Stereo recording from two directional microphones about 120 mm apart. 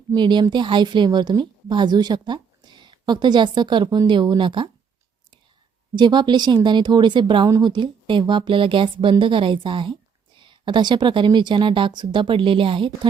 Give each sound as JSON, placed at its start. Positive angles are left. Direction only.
{"t": 0.1, "sound": "a woman's voice", "side_deg": -40}
{"t": 5.9, "sound": "a woman's voice", "side_deg": -40}